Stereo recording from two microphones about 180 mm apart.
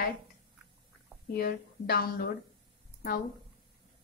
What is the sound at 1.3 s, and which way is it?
Speech, 55° left (ahead or behind).